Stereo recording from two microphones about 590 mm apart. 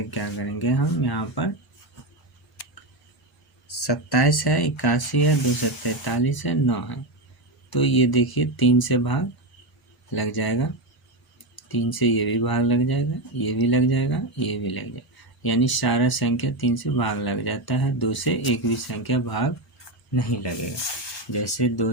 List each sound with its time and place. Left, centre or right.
0.1 s speech: left
3.7 s speech: left